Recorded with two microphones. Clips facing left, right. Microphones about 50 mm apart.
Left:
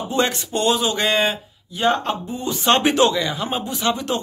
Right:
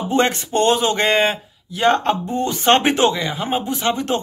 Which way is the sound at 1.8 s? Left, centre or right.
Right.